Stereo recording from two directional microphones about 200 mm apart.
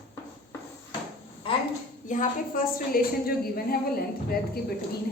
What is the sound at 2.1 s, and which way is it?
A woman's voice, 40° left (ahead or behind).